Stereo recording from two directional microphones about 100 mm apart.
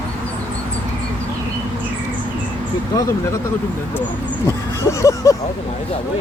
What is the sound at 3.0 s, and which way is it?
Speech, 30° left (ahead or behind).